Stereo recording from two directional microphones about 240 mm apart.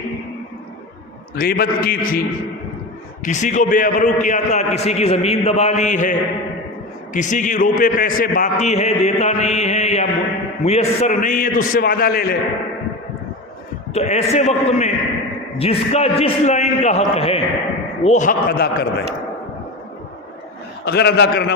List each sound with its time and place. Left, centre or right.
1.4 s a man's voice: left
3.2 s a man's voice: left
13.9 s a man's voice: left
20.8 s a man's voice: left